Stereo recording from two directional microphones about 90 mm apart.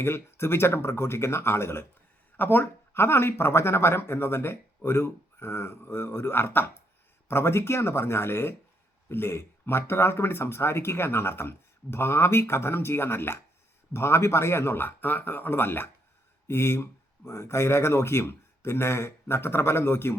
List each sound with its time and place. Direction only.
0.0 s speech: 25° left (ahead or behind)